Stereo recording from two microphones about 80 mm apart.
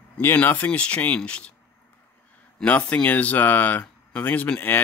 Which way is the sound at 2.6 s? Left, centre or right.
Centre.